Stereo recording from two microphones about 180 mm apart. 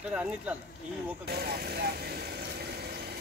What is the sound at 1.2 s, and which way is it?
Vehicle, 60° right (ahead or behind).